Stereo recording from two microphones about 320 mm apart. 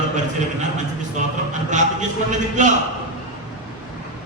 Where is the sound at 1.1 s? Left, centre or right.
Right.